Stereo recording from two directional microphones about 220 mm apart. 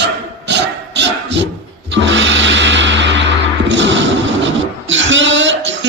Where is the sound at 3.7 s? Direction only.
55° right (ahead or behind).